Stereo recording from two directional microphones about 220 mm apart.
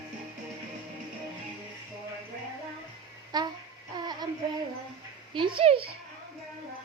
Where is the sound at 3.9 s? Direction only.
20° right (ahead or behind).